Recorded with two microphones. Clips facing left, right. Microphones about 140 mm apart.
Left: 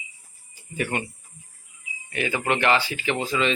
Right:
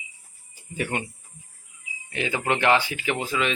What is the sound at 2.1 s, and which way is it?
Speech, 15° right (ahead or behind).